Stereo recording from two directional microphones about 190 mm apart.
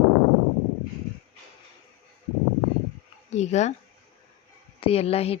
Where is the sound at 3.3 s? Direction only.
35° left (ahead or behind).